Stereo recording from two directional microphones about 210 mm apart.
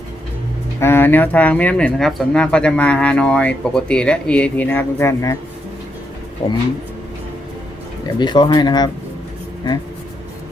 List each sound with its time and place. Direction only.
0.8 s speech: 10° left (ahead or behind)
6.4 s speech: 30° left (ahead or behind)
8.2 s speech: 20° left (ahead or behind)